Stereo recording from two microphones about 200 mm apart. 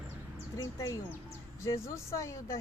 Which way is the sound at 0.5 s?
15° left (ahead or behind).